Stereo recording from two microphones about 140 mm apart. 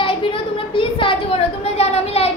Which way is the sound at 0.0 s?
40° left (ahead or behind).